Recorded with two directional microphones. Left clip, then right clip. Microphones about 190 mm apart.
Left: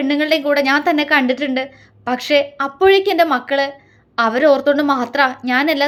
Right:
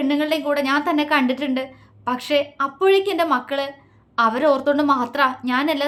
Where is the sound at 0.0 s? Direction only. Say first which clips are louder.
Left 4 dB; 15° left (ahead or behind).